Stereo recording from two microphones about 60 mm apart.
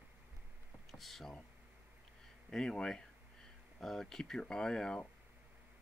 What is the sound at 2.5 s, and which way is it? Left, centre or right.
Speech, centre.